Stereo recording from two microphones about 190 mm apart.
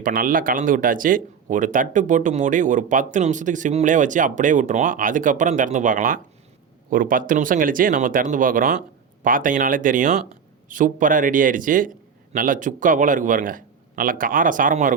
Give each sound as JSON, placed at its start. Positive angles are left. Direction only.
{"t": 0.0, "sound": "speech", "side_deg": -45}